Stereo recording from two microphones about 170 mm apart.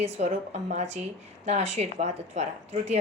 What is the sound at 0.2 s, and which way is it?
A woman's voice, 40° right (ahead or behind).